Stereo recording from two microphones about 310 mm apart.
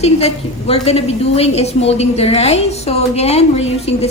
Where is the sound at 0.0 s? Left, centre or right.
Centre.